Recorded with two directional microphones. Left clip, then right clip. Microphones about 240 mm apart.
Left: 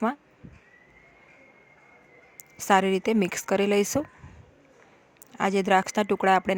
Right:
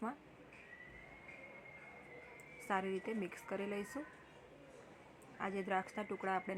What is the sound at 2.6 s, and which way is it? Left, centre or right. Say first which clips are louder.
Speech: left 18 dB; left.